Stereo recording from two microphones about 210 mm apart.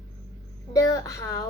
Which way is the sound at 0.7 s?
15° left (ahead or behind).